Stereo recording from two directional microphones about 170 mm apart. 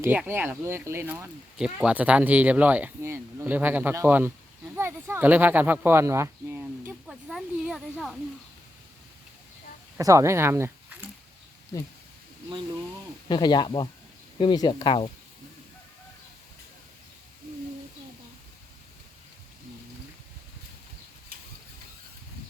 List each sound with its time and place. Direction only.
0.0 s speech: 10° right (ahead or behind)
10.0 s speech: 20° right (ahead or behind)
11.7 s speech: 20° left (ahead or behind)
13.2 s speech: 25° left (ahead or behind)